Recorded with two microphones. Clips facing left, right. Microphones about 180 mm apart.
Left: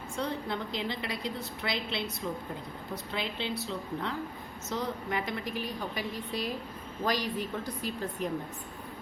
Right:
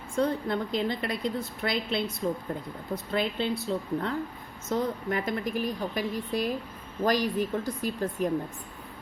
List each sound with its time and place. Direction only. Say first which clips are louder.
0.2 s a woman's voice: right 7 dB; 50° right (ahead or behind)